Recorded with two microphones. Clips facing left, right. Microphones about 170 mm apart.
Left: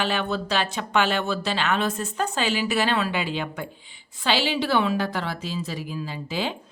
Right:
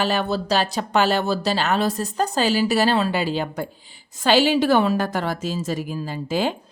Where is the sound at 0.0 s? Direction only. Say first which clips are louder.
Right 3 dB; 40° right (ahead or behind).